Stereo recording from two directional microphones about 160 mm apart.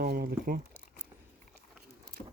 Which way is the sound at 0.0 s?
70° right (ahead or behind).